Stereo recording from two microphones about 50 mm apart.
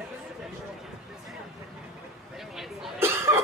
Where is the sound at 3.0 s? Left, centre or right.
Right.